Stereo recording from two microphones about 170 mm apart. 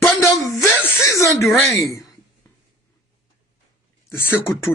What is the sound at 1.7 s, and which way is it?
Speech, 20° left (ahead or behind).